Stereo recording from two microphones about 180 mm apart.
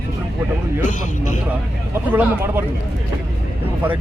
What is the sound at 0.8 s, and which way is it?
Speech, 45° left (ahead or behind).